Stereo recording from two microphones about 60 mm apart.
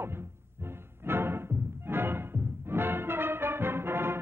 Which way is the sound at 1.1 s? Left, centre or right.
Right.